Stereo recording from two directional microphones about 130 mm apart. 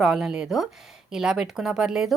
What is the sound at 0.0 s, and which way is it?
A woman's voice, 5° right (ahead or behind).